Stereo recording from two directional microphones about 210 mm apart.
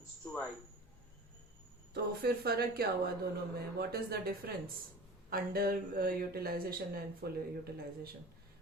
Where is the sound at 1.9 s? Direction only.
50° right (ahead or behind).